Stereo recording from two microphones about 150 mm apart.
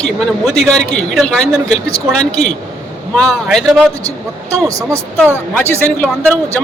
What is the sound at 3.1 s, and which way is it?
Speech, 5° left (ahead or behind).